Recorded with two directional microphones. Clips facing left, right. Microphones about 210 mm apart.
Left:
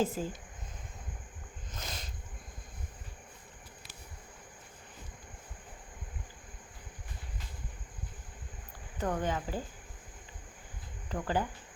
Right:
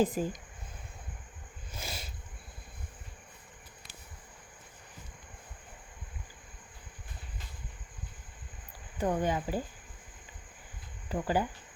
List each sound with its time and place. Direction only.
0.0 s speech: 15° right (ahead or behind)
1.7 s a sound: 10° right (ahead or behind)
9.0 s speech: 10° right (ahead or behind)
11.1 s speech: 10° right (ahead or behind)